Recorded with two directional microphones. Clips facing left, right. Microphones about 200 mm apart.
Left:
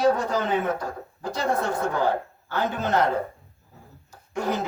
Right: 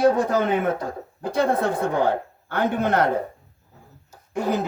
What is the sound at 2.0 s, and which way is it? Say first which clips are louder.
Speech: right 2 dB; 55° right (ahead or behind).